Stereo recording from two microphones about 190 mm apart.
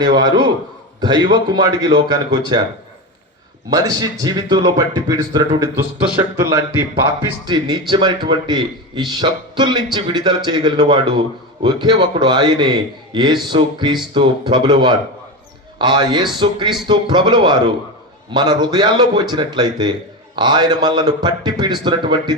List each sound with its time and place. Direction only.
0.0 s a man's voice: 20° right (ahead or behind)
3.7 s a man's voice: 20° right (ahead or behind)
7.4 s a man's voice: 25° right (ahead or behind)